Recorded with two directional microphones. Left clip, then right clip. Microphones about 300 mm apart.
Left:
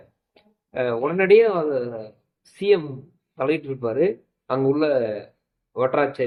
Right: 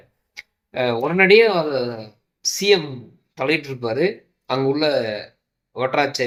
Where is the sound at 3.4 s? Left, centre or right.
Centre.